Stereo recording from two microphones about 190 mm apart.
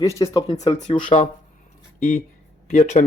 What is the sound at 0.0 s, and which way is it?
Speech, 15° left (ahead or behind).